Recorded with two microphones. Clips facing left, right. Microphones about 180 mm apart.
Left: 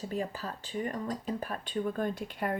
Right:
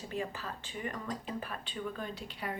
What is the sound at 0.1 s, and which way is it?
Speech, 40° left (ahead or behind).